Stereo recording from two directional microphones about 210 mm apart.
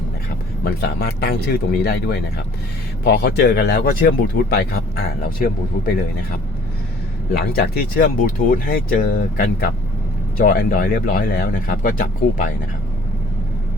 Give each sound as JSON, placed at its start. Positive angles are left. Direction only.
{"t": 0.6, "sound": "speech", "side_deg": 50}